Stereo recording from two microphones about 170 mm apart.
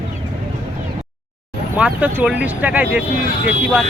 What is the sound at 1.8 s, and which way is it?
Speech, 10° right (ahead or behind).